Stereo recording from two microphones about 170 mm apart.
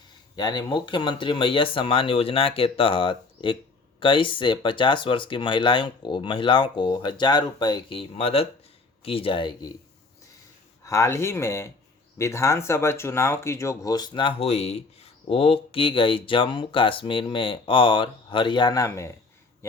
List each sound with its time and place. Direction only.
0.3 s speech: 25° left (ahead or behind)
10.8 s speech: 15° left (ahead or behind)